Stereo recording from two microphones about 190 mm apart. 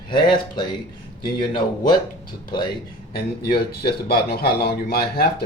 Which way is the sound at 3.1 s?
55° left (ahead or behind).